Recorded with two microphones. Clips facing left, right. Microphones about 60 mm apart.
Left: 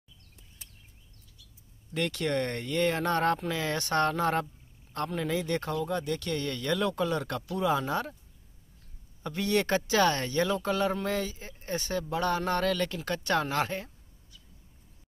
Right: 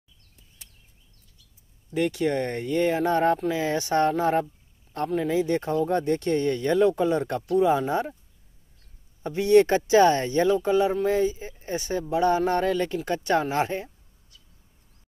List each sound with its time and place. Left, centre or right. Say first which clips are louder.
2.0 s speech: right 5 dB; centre
5.8 s speech: right 7 dB; right; by 8.2 s centre
9.2 s speech: right 10 dB; right